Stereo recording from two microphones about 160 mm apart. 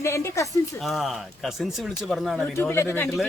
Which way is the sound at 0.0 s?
15° left (ahead or behind).